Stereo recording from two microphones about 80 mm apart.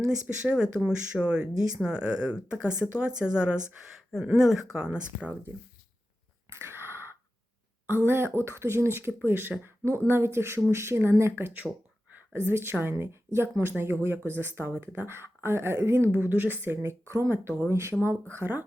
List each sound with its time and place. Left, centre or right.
0.0 s speech: centre
6.5 s a sound: right
7.9 s speech: right